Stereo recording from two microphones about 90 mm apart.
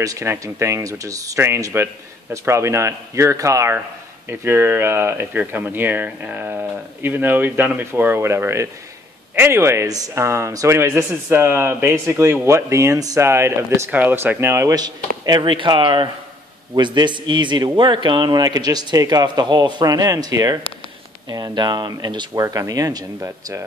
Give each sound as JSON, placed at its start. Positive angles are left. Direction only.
{"t": 0.0, "sound": "speech", "side_deg": -40}
{"t": 1.7, "sound": "speech", "side_deg": -25}
{"t": 13.8, "sound": "speech", "side_deg": -20}
{"t": 14.7, "sound": "speech", "side_deg": -50}
{"t": 15.4, "sound": "a man's voice", "side_deg": -65}
{"t": 22.4, "sound": "speech", "side_deg": -40}